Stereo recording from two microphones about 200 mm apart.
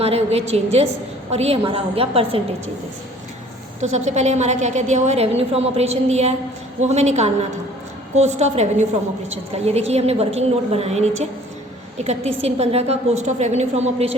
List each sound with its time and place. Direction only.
0.0 s a woman's voice: 30° right (ahead or behind)
3.8 s a woman's voice: 35° right (ahead or behind)